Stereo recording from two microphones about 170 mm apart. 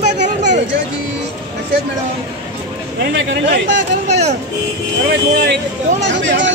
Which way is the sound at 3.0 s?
90° right.